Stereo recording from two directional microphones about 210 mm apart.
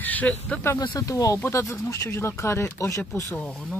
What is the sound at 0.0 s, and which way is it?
Speech, 5° left (ahead or behind).